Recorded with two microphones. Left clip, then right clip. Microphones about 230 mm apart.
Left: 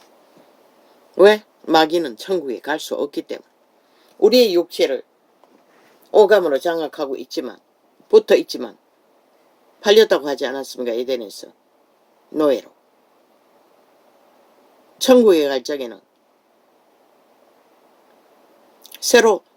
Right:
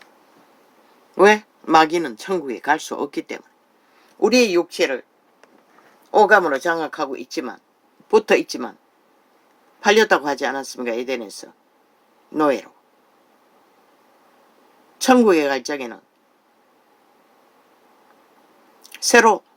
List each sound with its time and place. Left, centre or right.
1.1 s speech: right
6.1 s speech: right
9.8 s speech: right
12.3 s speech: right
14.9 s speech: right
18.9 s speech: right